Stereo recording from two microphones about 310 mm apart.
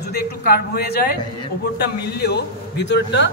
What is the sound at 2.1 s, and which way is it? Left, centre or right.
A man's voice, left.